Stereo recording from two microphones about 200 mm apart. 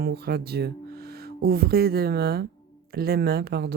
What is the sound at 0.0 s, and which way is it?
Speech, 50° right (ahead or behind).